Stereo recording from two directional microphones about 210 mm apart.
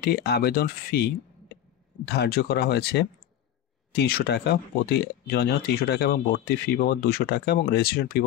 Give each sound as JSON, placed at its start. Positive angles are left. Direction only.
{"t": 0.0, "sound": "speech", "side_deg": 50}